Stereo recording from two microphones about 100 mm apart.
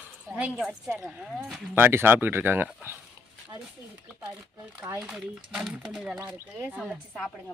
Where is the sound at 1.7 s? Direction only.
20° right (ahead or behind).